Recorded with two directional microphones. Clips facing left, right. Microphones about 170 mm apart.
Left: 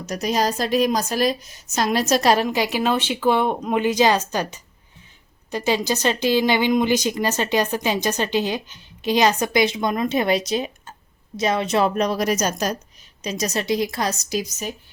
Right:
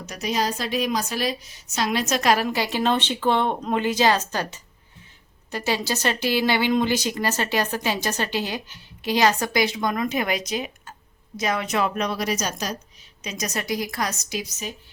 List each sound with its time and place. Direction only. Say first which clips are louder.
0.0 s a woman's voice: left 4 dB; 40° left (ahead or behind)
2.5 s a woman's voice: left 2 dB; 15° left (ahead or behind); by 13.3 s 45° left (ahead or behind)
13.3 s speech: left 5 dB; 30° left (ahead or behind)